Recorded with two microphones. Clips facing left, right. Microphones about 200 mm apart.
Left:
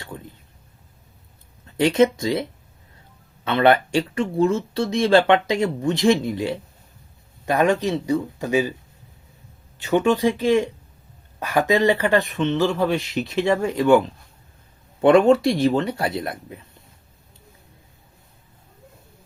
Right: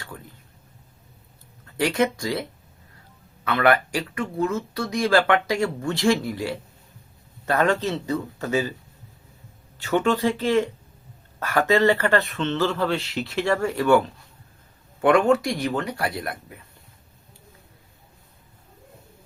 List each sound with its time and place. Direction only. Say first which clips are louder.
0.1 s a sound: left 5 dB; 20° left (ahead or behind)
1.6 s speech: left 5 dB; 20° left (ahead or behind)
9.7 s speech: left 3 dB; 15° left (ahead or behind)
15.0 s speech: left 4 dB; 25° left (ahead or behind)